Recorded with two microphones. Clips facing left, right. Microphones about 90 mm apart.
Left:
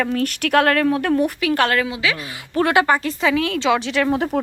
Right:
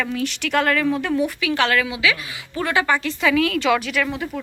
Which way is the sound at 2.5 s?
60° left (ahead or behind).